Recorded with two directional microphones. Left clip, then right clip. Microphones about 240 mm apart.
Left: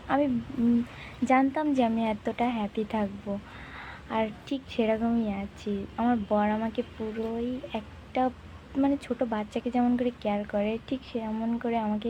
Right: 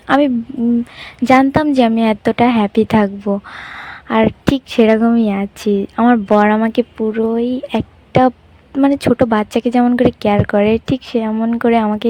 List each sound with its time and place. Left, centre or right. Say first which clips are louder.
0.9 s a woman's voice: right 15 dB; right